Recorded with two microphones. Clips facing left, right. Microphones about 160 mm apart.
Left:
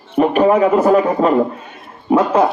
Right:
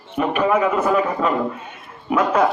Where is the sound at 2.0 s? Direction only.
30° left (ahead or behind).